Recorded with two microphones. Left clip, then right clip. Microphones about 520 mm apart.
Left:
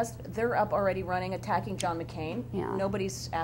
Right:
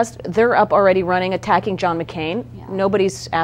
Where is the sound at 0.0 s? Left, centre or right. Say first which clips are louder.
Right 14 dB; right.